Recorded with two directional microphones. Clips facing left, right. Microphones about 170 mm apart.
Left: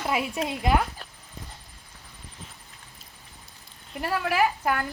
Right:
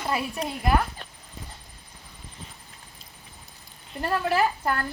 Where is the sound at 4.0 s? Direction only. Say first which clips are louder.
Right 1 dB; 10° left (ahead or behind).